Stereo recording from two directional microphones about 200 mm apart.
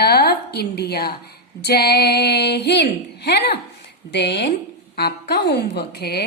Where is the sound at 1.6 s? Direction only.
55° left (ahead or behind).